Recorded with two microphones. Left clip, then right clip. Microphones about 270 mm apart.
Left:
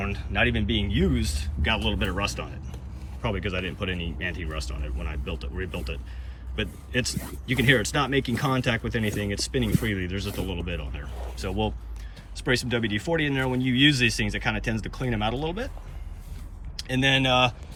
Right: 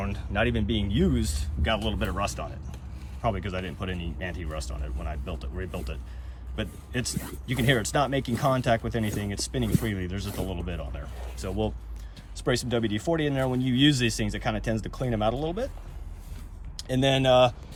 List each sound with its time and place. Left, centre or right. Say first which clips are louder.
0.0 s speech: left 3 dB; centre
16.8 s speech: left 1 dB; centre